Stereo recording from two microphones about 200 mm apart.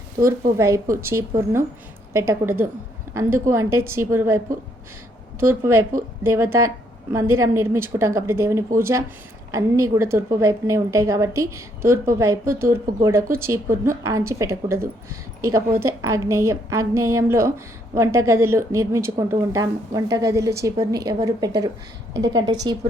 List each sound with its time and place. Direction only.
0.5 s a woman's voice: 15° right (ahead or behind)
5.4 s a woman's voice: 10° right (ahead or behind)